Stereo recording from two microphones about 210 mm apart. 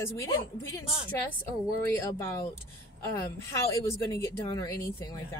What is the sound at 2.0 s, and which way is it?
Speech, 15° left (ahead or behind).